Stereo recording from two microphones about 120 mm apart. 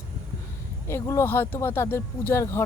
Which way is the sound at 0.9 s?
25° left (ahead or behind).